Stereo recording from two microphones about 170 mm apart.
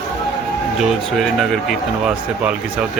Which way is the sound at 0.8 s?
Centre (ahead or behind).